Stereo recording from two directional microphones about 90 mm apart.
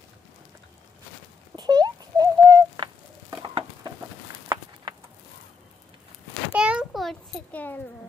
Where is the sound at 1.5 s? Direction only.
50° right (ahead or behind).